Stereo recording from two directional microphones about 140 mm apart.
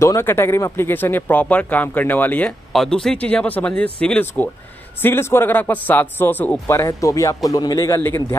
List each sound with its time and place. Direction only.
0.0 s speech: 20° left (ahead or behind)